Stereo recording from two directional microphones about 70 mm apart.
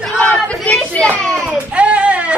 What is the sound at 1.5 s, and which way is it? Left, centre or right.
Speech, centre.